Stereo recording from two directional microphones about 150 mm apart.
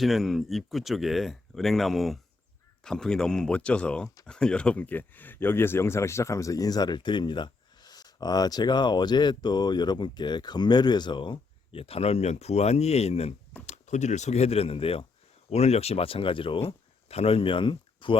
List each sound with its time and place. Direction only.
0.0 s speech: centre (ahead or behind); by 18.2 s 35° left (ahead or behind)